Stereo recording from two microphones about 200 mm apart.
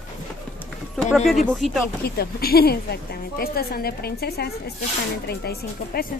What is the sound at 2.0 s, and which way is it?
A woman's voice, 50° left (ahead or behind).